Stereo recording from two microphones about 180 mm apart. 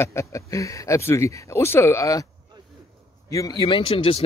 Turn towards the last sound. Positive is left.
turn(degrees=30)  # may be behind; listen again after turning